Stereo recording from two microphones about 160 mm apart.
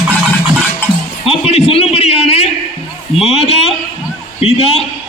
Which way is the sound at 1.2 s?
40° left (ahead or behind).